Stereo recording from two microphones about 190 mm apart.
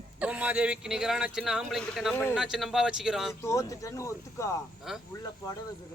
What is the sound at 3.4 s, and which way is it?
Speech, 15° left (ahead or behind).